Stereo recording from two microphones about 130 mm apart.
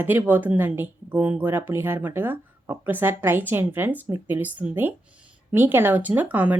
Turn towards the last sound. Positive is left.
turn(degrees=-10)  # may be behind; listen again after turning